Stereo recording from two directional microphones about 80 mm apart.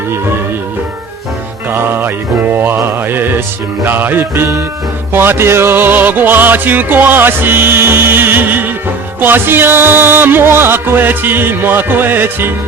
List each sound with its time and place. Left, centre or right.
1.7 s music: right
2.7 s mantra: right
3.8 s music: right